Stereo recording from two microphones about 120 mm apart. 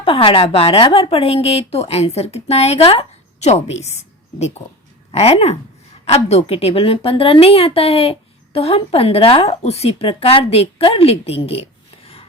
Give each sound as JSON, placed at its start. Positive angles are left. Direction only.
{"t": 0.0, "sound": "speech", "side_deg": 50}